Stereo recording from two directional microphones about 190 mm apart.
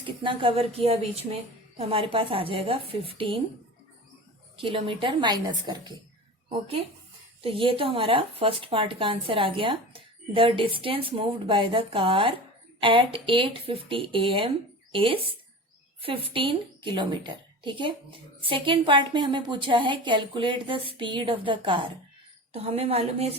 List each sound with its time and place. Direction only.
0.0 s a woman's voice: 25° right (ahead or behind)
4.5 s a woman's voice: 30° right (ahead or behind)